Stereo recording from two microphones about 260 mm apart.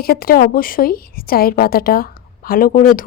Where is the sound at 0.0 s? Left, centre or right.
Left.